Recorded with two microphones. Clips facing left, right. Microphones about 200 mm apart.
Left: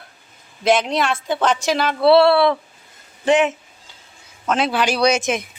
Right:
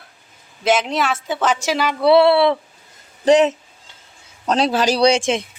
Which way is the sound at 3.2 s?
40° right (ahead or behind).